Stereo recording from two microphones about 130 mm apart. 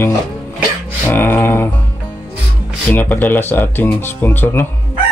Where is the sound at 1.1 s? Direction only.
15° left (ahead or behind).